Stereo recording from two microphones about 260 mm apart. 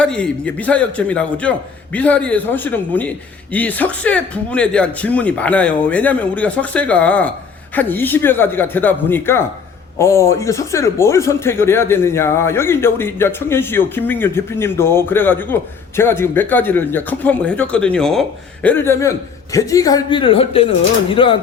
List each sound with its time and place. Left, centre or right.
0.0 s a man's voice: centre